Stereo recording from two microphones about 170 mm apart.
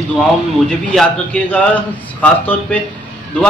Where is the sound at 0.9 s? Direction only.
5° left (ahead or behind).